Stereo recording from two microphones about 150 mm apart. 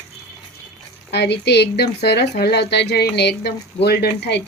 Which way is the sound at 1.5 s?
90° left.